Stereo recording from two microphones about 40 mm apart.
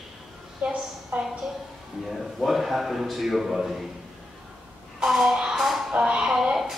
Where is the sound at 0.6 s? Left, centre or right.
Right.